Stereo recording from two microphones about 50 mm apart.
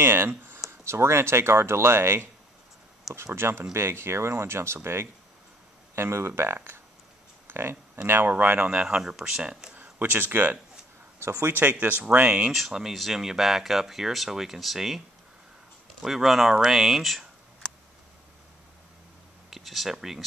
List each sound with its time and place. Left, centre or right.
0.0 s speech: right
0.7 s speech: right
3.3 s speech: right
5.9 s speech: right
7.4 s a sound: right
8.3 s speech: right
9.0 s speech: centre
9.8 s speech: right
11.1 s speech: right
11.5 s speech: right
12.5 s speech: centre
16.0 s speech: centre
19.5 s speech: centre